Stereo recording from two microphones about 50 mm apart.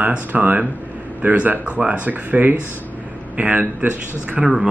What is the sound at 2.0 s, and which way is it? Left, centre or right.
Speech, right.